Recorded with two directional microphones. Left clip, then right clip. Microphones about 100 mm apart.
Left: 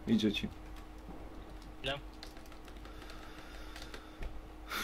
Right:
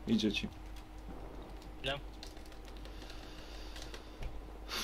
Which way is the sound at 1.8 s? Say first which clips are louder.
Even; centre (ahead or behind).